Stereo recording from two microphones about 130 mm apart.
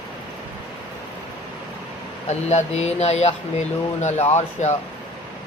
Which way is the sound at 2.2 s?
60° left (ahead or behind).